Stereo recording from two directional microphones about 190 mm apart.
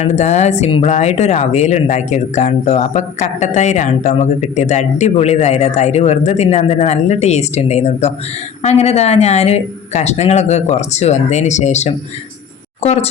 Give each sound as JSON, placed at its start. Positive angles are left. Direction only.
{"t": 0.0, "sound": "speech", "side_deg": 35}